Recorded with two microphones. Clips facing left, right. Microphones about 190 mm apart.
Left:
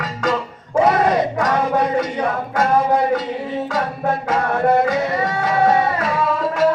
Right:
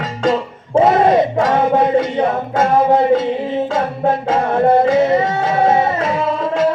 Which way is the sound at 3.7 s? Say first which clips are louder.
Right 2 dB; 25° right (ahead or behind).